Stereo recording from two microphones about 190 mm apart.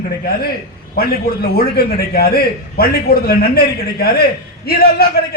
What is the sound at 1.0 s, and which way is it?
A man's voice, 55° left (ahead or behind).